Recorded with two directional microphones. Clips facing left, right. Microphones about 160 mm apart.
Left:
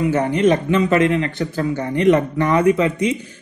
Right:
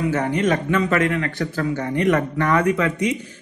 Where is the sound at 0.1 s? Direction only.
25° left (ahead or behind).